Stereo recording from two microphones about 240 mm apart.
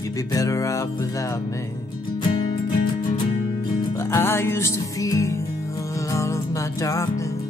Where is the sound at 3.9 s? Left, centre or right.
Centre.